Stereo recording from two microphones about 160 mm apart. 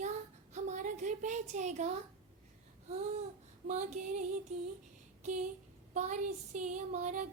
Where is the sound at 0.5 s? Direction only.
50° right (ahead or behind).